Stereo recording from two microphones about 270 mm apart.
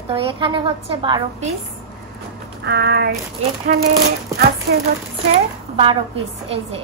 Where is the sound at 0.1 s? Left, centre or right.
Centre.